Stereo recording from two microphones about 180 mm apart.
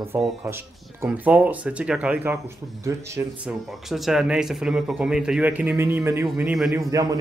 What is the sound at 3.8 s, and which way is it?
Speech, centre (ahead or behind).